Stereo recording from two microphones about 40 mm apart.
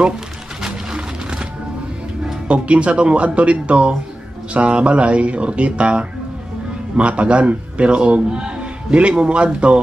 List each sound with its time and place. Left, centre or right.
2.4 s a man's voice: right